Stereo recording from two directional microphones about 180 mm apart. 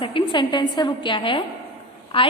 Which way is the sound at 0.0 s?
25° left (ahead or behind).